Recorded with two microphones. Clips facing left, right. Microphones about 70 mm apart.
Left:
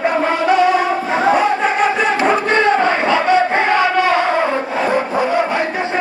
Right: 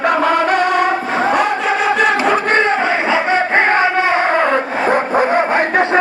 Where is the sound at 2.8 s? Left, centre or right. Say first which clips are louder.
Left 1 dB; centre.